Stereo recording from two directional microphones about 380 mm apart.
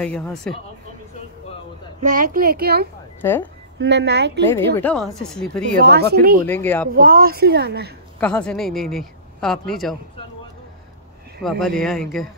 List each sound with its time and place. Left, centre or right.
0.0 s speech: centre
2.0 s a woman's voice: centre
3.2 s speech: centre
3.7 s a woman's voice: right
4.7 s speech: centre
5.9 s a woman's voice: right
6.4 s speech: centre
6.9 s a woman's voice: right
8.2 s speech: centre
11.4 s speech: centre